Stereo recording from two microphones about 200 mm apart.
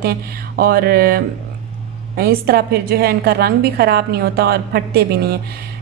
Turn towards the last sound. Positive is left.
turn(degrees=-50)  # may be behind; listen again after turning